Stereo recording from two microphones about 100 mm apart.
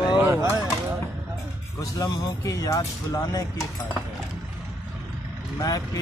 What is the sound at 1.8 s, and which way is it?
Speech, 35° left (ahead or behind).